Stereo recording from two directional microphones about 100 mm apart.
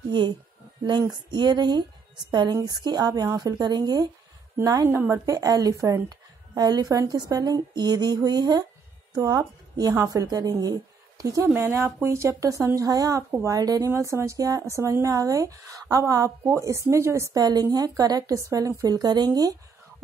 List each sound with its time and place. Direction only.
0.1 s a woman's voice: 50° right (ahead or behind)
4.8 s a woman's voice: 25° right (ahead or behind)
11.4 s speech: 20° right (ahead or behind)
13.3 s speech: 25° right (ahead or behind)
13.6 s speech: 40° right (ahead or behind)
13.8 s speech: 25° right (ahead or behind)